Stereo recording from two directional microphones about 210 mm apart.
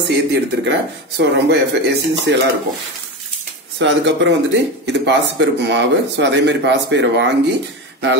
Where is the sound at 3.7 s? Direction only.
55° right (ahead or behind).